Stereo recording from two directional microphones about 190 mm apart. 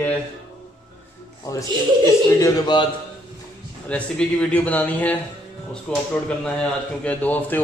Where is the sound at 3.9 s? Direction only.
5° left (ahead or behind).